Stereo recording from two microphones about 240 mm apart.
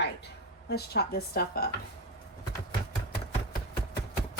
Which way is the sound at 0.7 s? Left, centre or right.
Left.